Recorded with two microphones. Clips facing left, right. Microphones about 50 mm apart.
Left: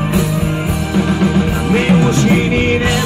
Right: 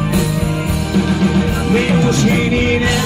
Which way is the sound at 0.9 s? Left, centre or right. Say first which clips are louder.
Left 1 dB; left.